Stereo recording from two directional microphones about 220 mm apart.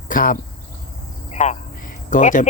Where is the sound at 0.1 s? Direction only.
40° left (ahead or behind).